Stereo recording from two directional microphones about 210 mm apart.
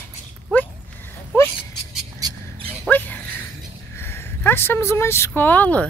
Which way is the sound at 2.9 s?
10° left (ahead or behind).